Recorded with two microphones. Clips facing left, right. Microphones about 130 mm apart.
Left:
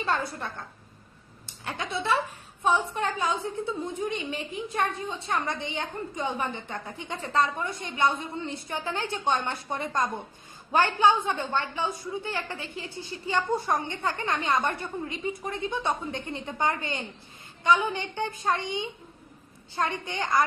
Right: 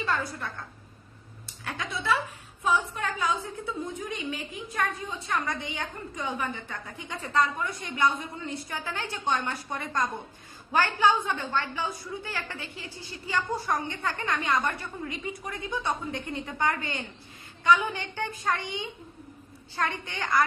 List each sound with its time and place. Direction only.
0.0 s a woman's voice: 25° left (ahead or behind)
1.5 s a woman's voice: 25° left (ahead or behind)